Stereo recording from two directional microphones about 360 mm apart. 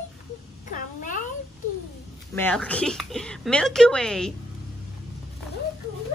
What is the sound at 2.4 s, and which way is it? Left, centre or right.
A woman's voice, centre.